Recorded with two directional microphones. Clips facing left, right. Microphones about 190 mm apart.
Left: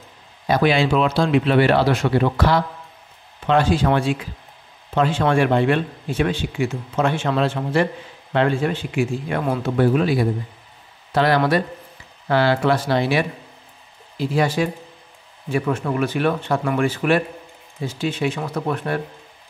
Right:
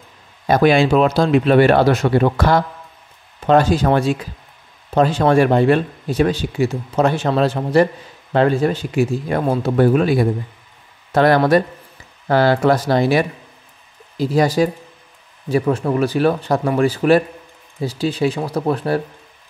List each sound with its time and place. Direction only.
0.5 s speech: 45° right (ahead or behind)